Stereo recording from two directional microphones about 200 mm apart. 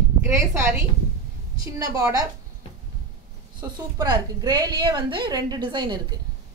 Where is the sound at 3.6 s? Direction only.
15° right (ahead or behind).